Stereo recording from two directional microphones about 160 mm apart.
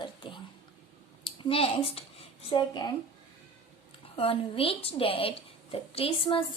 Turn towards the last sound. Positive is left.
turn(degrees=35)  # may be behind; listen again after turning